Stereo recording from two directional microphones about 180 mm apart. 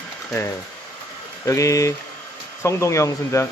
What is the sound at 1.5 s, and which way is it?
Speech, 15° left (ahead or behind).